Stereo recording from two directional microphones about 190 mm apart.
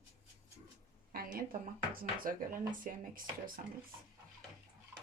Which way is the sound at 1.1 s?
50° right (ahead or behind).